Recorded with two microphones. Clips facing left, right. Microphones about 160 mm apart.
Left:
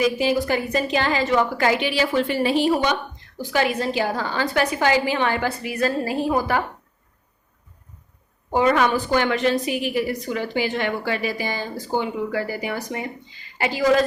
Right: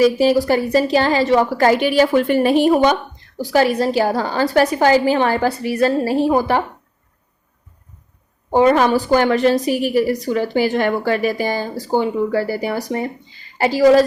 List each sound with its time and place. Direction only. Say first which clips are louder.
0.0 s a woman's voice: right 7 dB; 35° right (ahead or behind)
3.4 s a woman's voice: right 6 dB; 35° right (ahead or behind)
8.5 s a woman's voice: right 5 dB; 35° right (ahead or behind)